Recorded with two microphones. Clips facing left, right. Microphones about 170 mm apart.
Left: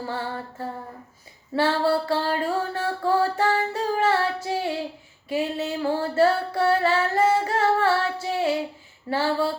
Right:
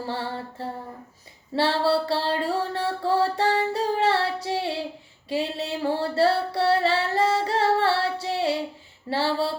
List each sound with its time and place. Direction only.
0.1 s mantra: 30° right (ahead or behind)
1.5 s music: 30° right (ahead or behind)
5.3 s singing: 30° right (ahead or behind)
9.0 s mantra: 30° right (ahead or behind)